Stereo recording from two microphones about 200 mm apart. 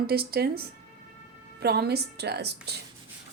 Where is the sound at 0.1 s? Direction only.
50° right (ahead or behind).